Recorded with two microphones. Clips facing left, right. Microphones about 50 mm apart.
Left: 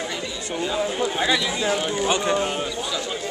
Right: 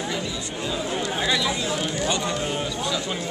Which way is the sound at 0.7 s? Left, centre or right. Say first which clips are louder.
Left 3 dB; centre.